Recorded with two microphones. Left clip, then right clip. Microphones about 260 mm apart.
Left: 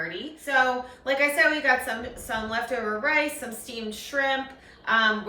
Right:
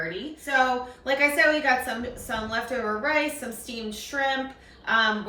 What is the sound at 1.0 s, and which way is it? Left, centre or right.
A woman's voice, centre.